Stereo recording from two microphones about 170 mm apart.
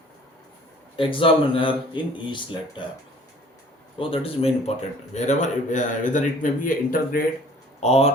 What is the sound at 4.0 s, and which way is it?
Speech, 35° left (ahead or behind).